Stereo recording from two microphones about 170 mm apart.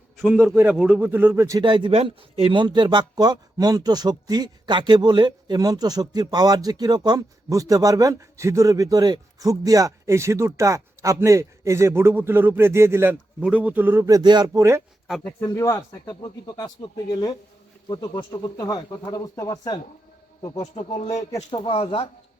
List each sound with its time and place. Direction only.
0.3 s a man's voice: 10° right (ahead or behind)
15.2 s speech: 15° left (ahead or behind)
20.7 s speech: 40° left (ahead or behind)
21.2 s speech: 20° left (ahead or behind)
21.6 s speech: 30° left (ahead or behind)